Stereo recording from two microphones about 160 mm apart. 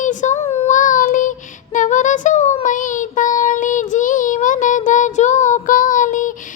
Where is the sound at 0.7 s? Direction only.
55° left (ahead or behind).